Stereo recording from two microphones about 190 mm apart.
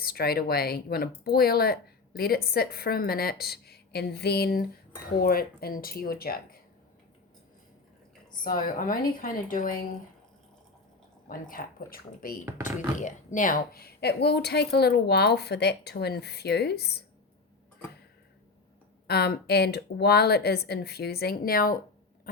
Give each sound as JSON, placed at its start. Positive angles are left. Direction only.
{"t": 0.0, "sound": "speech", "side_deg": 55}
{"t": 8.4, "sound": "speech", "side_deg": 45}
{"t": 11.3, "sound": "a woman's voice", "side_deg": 50}
{"t": 19.0, "sound": "a woman's voice", "side_deg": 55}